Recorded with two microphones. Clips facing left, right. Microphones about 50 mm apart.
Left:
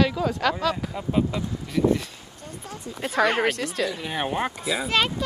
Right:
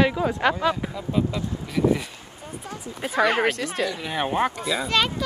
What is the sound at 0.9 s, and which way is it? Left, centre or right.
Speech, left.